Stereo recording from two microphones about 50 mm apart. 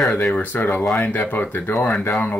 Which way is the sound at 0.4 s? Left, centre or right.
Left.